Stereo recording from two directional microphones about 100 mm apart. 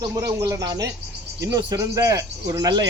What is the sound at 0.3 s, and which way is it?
Speech, 35° right (ahead or behind).